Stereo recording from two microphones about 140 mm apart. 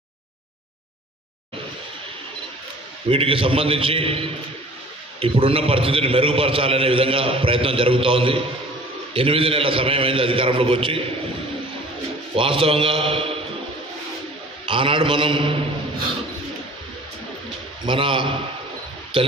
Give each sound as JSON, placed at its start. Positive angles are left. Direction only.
{"t": 3.1, "sound": "a man's voice", "side_deg": -40}
{"t": 12.4, "sound": "a man's voice", "side_deg": -40}
{"t": 14.7, "sound": "a man's voice", "side_deg": -40}
{"t": 17.8, "sound": "a man's voice", "side_deg": -40}